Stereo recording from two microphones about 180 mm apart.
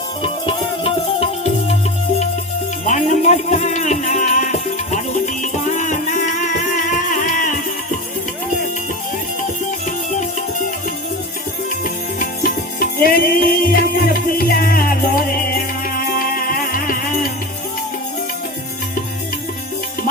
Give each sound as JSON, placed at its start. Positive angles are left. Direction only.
{"t": 0.2, "sound": "music", "side_deg": 30}
{"t": 2.8, "sound": "music", "side_deg": 40}
{"t": 11.8, "sound": "music", "side_deg": 50}